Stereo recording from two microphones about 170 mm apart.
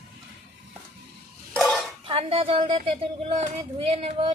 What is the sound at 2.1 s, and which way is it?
A woman's voice, 30° right (ahead or behind).